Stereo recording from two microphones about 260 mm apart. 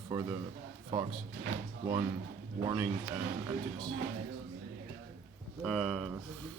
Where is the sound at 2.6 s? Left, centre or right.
Centre.